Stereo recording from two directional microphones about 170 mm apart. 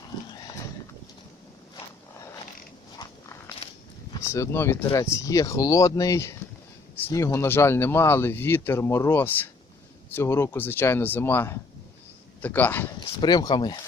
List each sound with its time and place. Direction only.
3.0 s biting: 20° left (ahead or behind)
4.1 s speech: 15° left (ahead or behind)
13.0 s speech: 25° left (ahead or behind)